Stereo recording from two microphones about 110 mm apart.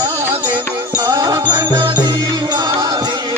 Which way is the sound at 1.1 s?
30° right (ahead or behind).